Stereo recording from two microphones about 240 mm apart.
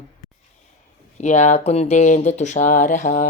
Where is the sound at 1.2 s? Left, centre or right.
Left.